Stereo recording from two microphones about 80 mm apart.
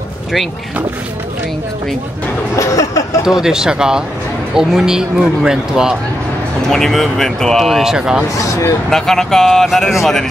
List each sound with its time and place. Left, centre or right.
2.5 s a sound: left
3.3 s speech: centre
6.7 s a man's voice: centre
8.4 s speech: left
8.9 s a man's voice: centre